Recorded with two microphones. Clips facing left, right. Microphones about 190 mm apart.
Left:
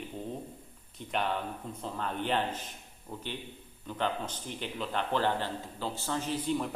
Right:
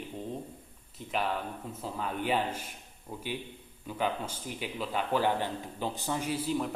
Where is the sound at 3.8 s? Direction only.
10° right (ahead or behind).